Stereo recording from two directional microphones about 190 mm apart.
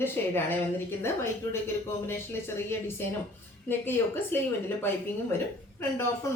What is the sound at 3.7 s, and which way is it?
Speech, 10° left (ahead or behind).